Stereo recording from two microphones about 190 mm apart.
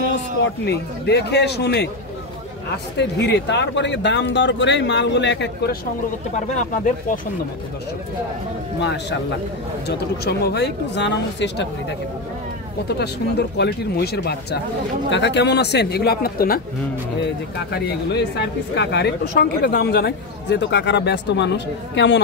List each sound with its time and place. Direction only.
0.1 s speech: 65° left (ahead or behind)
3.0 s speech: 65° left (ahead or behind)
9.8 s speech: 60° left (ahead or behind)
12.8 s speech: 60° left (ahead or behind)
17.6 s speech: 60° left (ahead or behind)